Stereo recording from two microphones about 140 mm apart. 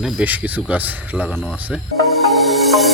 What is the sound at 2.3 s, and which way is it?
Music, centre (ahead or behind).